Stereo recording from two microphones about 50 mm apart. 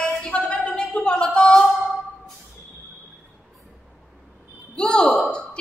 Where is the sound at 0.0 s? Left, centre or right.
Left.